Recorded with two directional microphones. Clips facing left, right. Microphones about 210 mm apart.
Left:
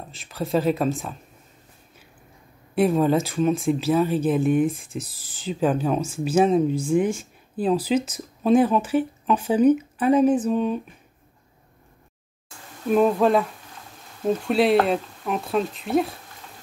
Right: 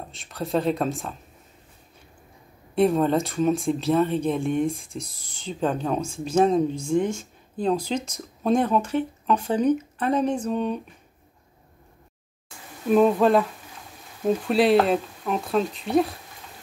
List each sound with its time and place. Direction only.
0.1 s speech: centre (ahead or behind)
2.7 s speech: centre (ahead or behind)
12.8 s speech: centre (ahead or behind)